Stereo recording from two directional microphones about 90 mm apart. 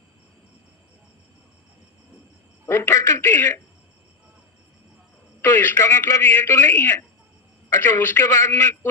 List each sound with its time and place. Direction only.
2.6 s a man's voice: 25° left (ahead or behind)
5.4 s a man's voice: 20° left (ahead or behind)